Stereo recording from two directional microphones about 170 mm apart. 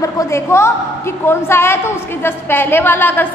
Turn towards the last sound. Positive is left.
turn(degrees=10)  # may be behind; listen again after turning